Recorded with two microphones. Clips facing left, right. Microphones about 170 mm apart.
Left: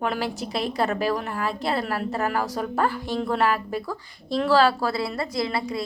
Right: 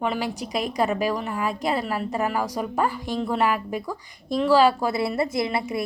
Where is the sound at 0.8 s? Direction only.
10° right (ahead or behind).